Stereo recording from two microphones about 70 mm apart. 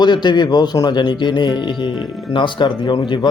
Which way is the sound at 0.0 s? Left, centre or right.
Left.